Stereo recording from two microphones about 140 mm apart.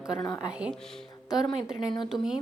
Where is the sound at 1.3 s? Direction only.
Centre (ahead or behind).